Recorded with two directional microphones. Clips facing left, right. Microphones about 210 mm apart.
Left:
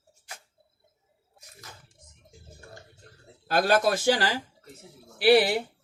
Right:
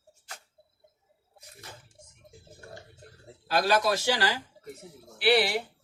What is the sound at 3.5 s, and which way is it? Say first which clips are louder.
Speech: left 2 dB; 55° left (ahead or behind).